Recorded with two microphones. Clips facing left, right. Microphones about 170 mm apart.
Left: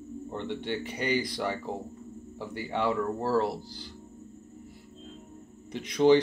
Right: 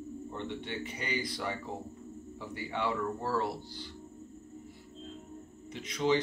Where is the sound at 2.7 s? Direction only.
40° left (ahead or behind).